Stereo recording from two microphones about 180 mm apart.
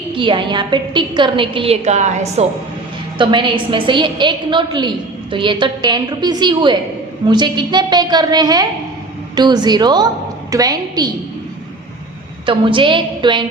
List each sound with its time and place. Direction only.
0.1 s a woman's voice: 25° right (ahead or behind)
3.2 s a woman's voice: 25° right (ahead or behind)
12.5 s a woman's voice: 30° right (ahead or behind)